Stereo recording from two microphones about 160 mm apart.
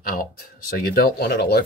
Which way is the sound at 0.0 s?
65° left (ahead or behind).